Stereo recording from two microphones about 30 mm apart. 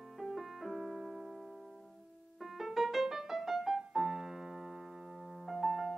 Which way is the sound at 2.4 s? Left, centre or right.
Centre.